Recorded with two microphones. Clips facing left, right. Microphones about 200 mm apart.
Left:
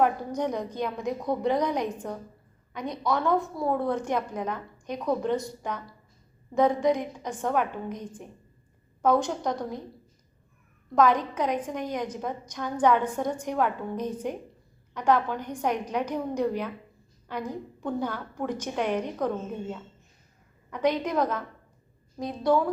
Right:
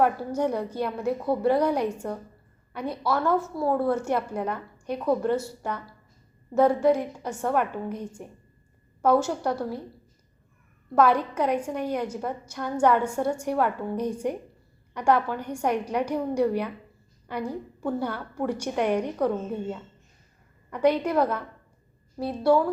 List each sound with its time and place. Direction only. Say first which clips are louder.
0.0 s a woman's voice: right 2 dB; 10° right (ahead or behind)
10.9 s a woman's voice: right 1 dB; 10° right (ahead or behind)